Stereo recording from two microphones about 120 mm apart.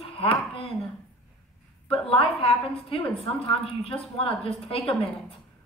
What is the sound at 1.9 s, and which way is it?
A woman's voice, 55° left (ahead or behind).